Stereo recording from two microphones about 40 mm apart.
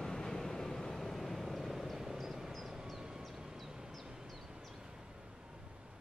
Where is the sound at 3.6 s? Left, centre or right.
Centre.